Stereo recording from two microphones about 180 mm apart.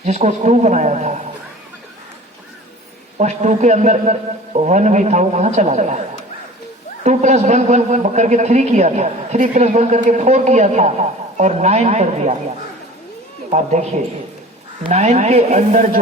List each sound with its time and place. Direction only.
0.0 s a man's voice: 40° right (ahead or behind)
3.2 s a man's voice: 40° right (ahead or behind)
7.0 s a man's voice: 40° right (ahead or behind)
13.5 s a man's voice: 40° right (ahead or behind)